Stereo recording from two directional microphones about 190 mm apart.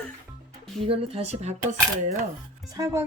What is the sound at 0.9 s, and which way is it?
Speech, 30° right (ahead or behind).